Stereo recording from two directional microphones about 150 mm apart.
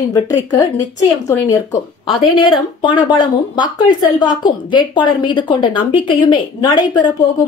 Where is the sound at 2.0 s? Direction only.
35° left (ahead or behind).